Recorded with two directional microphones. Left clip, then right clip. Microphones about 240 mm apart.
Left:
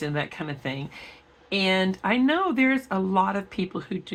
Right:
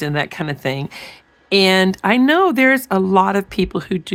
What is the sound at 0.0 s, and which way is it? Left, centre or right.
Speech, right.